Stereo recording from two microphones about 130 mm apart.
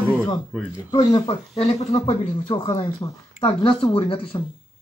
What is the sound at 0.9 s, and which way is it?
Speech, 35° left (ahead or behind).